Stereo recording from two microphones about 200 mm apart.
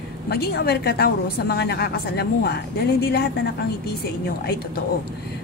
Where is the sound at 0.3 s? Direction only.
50° left (ahead or behind).